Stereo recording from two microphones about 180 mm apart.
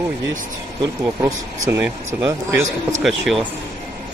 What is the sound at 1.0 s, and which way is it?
Speech, 10° right (ahead or behind).